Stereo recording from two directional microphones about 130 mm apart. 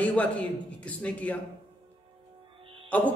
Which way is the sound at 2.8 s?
10° left (ahead or behind).